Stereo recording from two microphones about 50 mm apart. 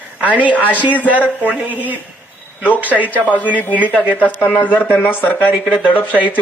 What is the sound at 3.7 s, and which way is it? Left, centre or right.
Speech, right.